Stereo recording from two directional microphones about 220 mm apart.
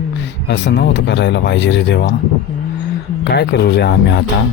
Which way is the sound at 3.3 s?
50° left (ahead or behind).